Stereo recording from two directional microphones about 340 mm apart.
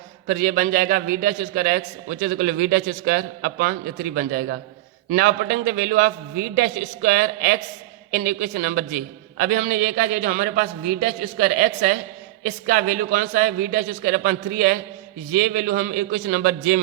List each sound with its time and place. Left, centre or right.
0.3 s a man's voice: right